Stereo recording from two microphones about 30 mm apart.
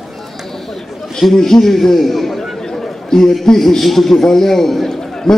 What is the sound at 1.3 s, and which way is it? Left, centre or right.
A man's voice, centre.